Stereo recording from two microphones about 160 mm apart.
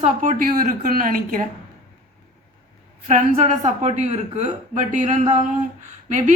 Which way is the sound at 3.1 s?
50° right (ahead or behind).